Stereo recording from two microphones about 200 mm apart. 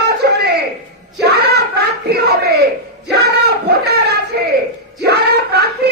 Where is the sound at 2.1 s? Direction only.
55° right (ahead or behind).